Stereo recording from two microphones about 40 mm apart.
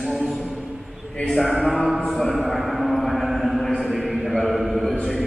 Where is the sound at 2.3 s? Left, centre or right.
Centre.